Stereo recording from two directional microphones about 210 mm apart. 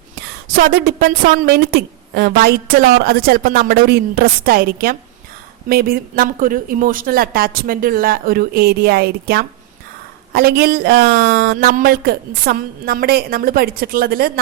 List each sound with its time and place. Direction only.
0.4 s a woman's voice: 45° right (ahead or behind)